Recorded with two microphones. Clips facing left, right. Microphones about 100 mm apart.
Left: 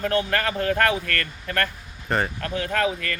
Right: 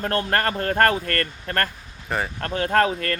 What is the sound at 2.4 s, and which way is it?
Speech, 50° right (ahead or behind).